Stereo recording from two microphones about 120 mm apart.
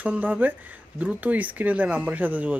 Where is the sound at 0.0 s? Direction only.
15° right (ahead or behind).